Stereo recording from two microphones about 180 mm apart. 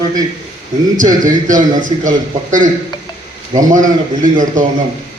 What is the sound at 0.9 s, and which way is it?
A man's voice, 45° right (ahead or behind).